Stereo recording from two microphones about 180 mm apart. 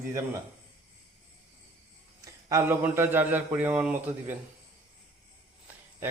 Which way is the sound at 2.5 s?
15° right (ahead or behind).